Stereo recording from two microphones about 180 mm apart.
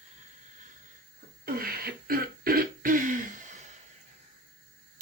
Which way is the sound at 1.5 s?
55° right (ahead or behind).